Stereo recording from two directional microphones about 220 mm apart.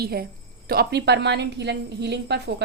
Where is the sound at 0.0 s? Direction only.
45° right (ahead or behind).